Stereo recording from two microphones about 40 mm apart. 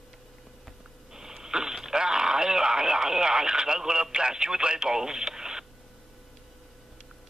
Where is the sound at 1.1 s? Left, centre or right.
Centre.